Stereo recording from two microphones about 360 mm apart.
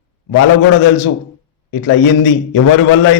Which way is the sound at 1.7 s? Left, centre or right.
Left.